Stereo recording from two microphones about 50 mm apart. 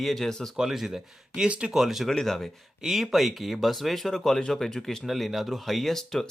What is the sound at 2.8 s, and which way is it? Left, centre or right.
Speech, centre.